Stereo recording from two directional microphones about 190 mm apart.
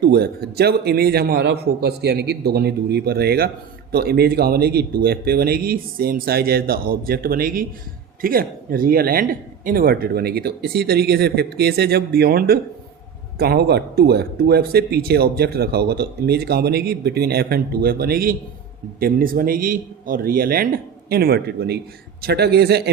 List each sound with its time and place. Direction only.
0.0 s speech: 55° right (ahead or behind)